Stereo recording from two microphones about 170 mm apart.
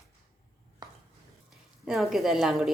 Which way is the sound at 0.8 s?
25° right (ahead or behind).